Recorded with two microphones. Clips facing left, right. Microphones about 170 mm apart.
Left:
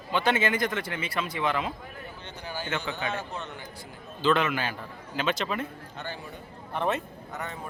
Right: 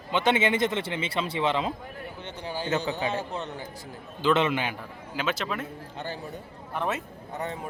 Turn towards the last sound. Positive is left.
turn(degrees=-30)  # may be behind; listen again after turning